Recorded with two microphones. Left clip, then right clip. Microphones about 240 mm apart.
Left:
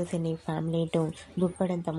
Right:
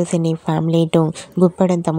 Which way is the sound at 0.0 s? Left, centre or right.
Right.